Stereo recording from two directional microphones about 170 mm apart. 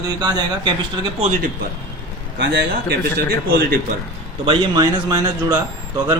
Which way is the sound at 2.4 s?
80° right.